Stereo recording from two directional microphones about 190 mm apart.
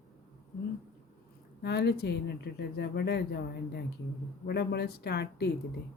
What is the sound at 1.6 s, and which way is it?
Speech, 60° left (ahead or behind).